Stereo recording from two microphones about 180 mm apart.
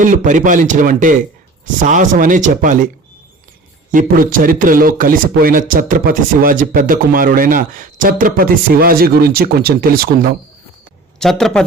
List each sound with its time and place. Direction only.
0.0 s speech: 45° right (ahead or behind)
3.9 s speech: 50° right (ahead or behind)
11.2 s a man's voice: centre (ahead or behind)